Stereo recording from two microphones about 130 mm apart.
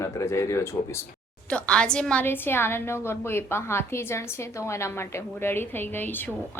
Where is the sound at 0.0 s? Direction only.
20° left (ahead or behind).